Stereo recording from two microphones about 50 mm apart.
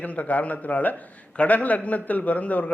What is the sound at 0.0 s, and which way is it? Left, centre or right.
A man's voice, left.